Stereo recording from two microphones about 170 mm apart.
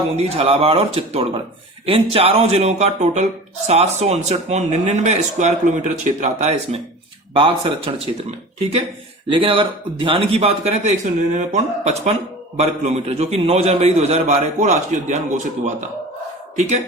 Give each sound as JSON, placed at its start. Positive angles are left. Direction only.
{"t": 0.2, "sound": "speech", "side_deg": -35}
{"t": 9.3, "sound": "speech", "side_deg": -30}
{"t": 16.6, "sound": "speech", "side_deg": -40}